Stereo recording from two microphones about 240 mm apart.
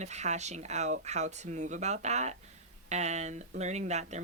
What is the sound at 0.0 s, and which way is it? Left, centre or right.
Speech, right.